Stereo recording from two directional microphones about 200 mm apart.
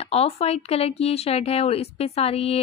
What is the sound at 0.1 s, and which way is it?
Speech, 30° left (ahead or behind).